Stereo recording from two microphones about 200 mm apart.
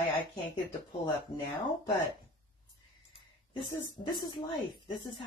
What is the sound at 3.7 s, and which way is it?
Speech, 20° left (ahead or behind).